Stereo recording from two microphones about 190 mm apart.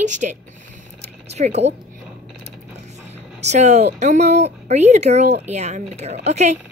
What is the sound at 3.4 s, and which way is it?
Speech, 35° right (ahead or behind).